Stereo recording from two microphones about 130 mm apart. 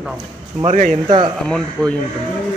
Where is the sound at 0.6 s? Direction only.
65° right (ahead or behind).